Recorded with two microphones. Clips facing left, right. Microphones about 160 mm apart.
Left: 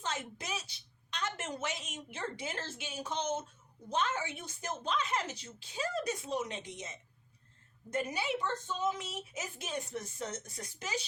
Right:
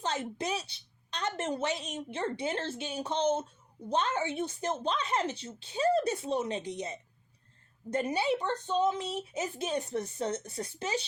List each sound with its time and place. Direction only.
0.0 s a woman's voice: 30° right (ahead or behind)